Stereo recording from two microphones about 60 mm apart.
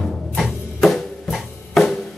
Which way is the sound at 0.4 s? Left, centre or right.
Centre.